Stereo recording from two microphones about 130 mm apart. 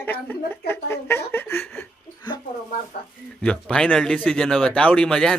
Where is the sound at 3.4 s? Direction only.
5° left (ahead or behind).